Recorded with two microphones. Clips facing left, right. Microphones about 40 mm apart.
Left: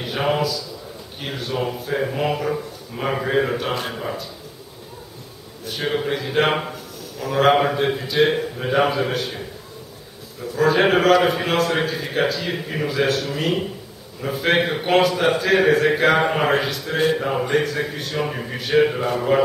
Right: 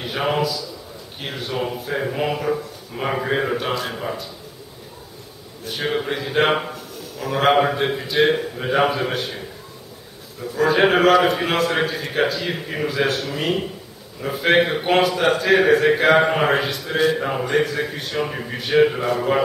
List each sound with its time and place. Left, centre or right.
0.0 s a man's voice: centre
5.7 s a man's voice: centre
10.4 s a man's voice: centre